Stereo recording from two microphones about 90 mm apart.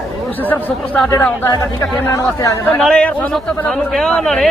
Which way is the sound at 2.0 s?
35° left (ahead or behind).